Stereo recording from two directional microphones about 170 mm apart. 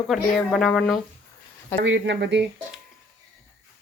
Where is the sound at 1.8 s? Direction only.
90° right.